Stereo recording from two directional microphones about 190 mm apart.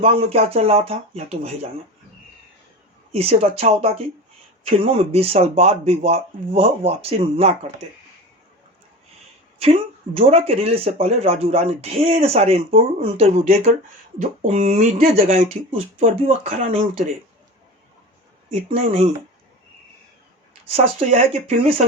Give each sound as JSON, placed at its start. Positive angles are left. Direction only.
{"t": 0.0, "sound": "speech", "side_deg": -30}
{"t": 3.1, "sound": "speech", "side_deg": -30}
{"t": 9.6, "sound": "speech", "side_deg": -30}
{"t": 20.7, "sound": "speech", "side_deg": -35}